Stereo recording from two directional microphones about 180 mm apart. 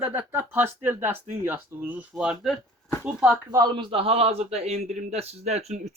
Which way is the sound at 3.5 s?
25° right (ahead or behind).